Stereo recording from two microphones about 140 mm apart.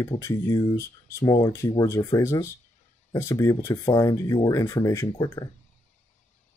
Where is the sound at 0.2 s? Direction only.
25° left (ahead or behind).